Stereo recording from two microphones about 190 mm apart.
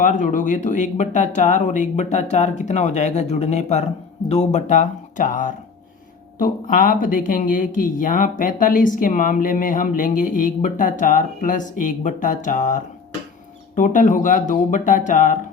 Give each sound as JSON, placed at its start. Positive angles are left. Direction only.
{"t": 0.0, "sound": "speech", "side_deg": 40}